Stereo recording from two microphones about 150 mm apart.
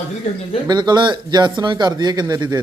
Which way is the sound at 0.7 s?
30° right (ahead or behind).